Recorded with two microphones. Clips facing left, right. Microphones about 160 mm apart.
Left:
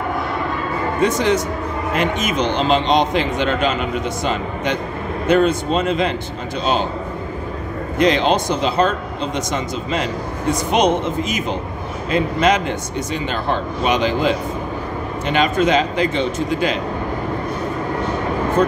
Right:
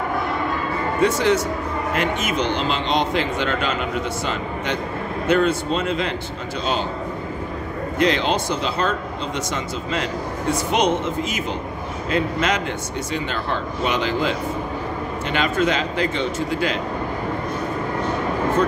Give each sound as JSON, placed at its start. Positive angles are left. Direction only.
{"t": 1.0, "sound": "a man's voice", "side_deg": 20}
{"t": 8.0, "sound": "a man's voice", "side_deg": 20}
{"t": 13.8, "sound": "a man's voice", "side_deg": 20}
{"t": 15.3, "sound": "a man's voice", "side_deg": 20}